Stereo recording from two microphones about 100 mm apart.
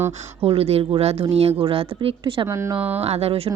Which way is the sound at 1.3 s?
75° right (ahead or behind).